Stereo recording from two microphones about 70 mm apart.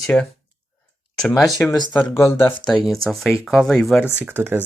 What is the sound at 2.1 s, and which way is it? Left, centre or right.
Speech, left.